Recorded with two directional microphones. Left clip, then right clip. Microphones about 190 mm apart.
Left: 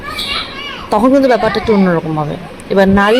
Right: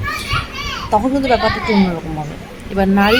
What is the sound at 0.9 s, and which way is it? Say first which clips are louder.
Speech: left 5 dB; 15° left (ahead or behind).